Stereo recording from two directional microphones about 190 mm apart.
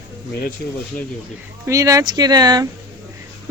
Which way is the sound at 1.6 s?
15° right (ahead or behind).